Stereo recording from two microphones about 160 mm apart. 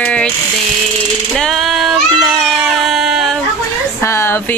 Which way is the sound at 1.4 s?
Centre (ahead or behind).